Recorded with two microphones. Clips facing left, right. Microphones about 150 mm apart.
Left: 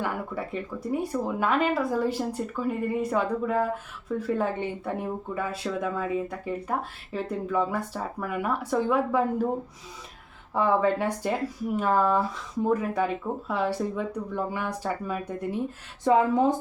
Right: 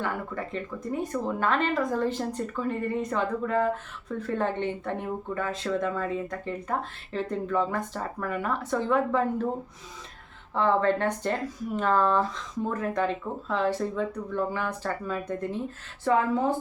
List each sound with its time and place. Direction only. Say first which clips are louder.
0.0 s speech: left 1 dB; 10° left (ahead or behind)
10.5 s speech: even; 10° left (ahead or behind)